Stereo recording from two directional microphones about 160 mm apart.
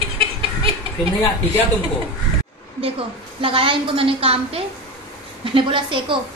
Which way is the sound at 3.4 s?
35° right (ahead or behind).